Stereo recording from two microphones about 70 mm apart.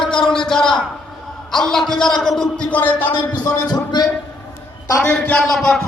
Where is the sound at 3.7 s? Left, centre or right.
Left.